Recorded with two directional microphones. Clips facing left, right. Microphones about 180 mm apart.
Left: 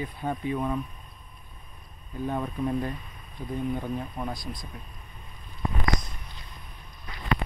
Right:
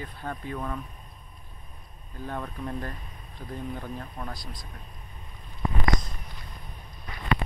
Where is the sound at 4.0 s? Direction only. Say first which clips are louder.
Left 4 dB; 10° left (ahead or behind).